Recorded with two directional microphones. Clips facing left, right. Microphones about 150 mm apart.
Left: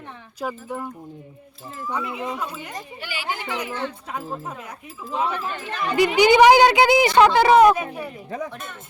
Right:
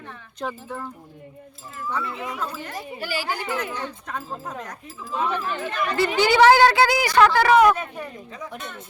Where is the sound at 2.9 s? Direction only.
40° right (ahead or behind).